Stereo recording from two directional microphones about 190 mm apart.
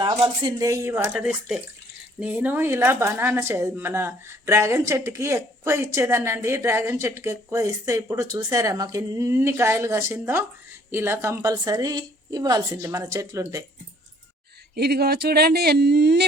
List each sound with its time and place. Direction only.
0.0 s speech: 25° right (ahead or behind)
14.8 s speech: 55° right (ahead or behind)